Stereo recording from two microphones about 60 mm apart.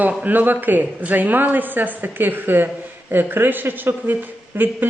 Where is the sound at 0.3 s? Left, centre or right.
Right.